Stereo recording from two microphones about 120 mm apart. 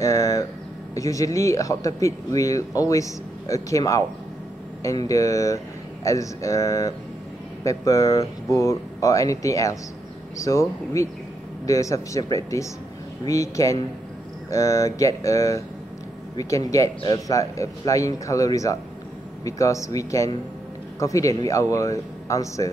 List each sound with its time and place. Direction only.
0.0 s a man's voice: 25° left (ahead or behind)